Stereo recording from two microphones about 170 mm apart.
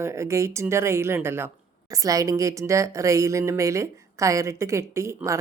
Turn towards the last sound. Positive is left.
turn(degrees=-15)  # may be behind; listen again after turning